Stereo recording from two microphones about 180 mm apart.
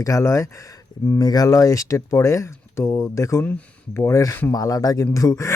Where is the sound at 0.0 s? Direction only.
15° left (ahead or behind).